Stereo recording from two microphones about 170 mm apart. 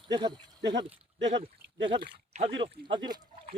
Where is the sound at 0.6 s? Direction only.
90° right.